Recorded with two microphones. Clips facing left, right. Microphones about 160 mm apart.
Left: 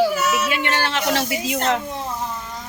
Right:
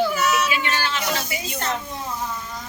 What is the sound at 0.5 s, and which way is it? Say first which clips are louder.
Speech: left 3 dB; 65° left (ahead or behind).